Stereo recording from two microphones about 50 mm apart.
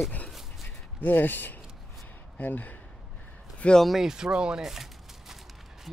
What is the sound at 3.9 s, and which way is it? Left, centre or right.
Speech, centre.